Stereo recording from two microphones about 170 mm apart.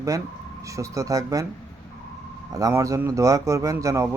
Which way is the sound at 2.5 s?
20° right (ahead or behind).